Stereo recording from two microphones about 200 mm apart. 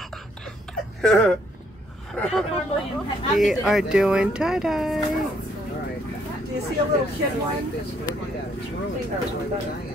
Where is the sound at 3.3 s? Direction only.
Centre (ahead or behind).